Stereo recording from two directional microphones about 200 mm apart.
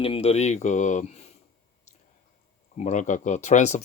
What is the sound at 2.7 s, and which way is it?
Speech, 35° left (ahead or behind).